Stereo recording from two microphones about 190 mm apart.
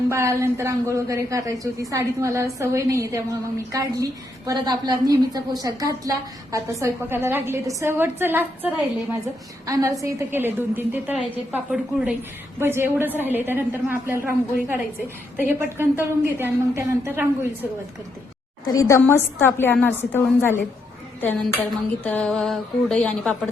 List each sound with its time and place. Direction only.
0.1 s a woman's voice: 15° right (ahead or behind)
4.4 s a woman's voice: 20° right (ahead or behind)
11.5 s a sound: 5° right (ahead or behind)
12.5 s a woman's voice: 10° right (ahead or behind)
18.7 s a woman's voice: 15° left (ahead or behind)
21.2 s a sound: 10° left (ahead or behind)